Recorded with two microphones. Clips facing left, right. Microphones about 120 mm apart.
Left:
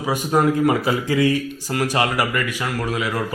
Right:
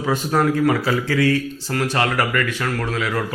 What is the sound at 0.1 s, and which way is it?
Speech, 15° left (ahead or behind).